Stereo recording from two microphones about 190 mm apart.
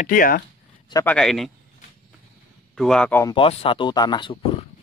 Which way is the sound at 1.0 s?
5° left (ahead or behind).